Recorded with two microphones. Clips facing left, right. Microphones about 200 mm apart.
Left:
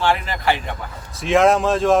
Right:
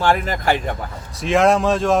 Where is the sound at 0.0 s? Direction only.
45° right (ahead or behind).